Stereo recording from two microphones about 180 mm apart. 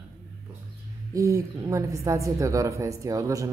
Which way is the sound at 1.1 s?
15° right (ahead or behind).